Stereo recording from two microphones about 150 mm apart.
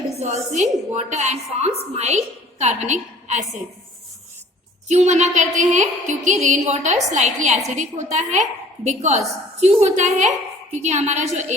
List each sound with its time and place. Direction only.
0.1 s a woman's voice: 50° right (ahead or behind)
4.9 s a woman's voice: 50° right (ahead or behind)